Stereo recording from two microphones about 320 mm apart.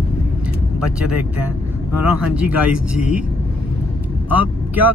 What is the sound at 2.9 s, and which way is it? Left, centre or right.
Speech, left.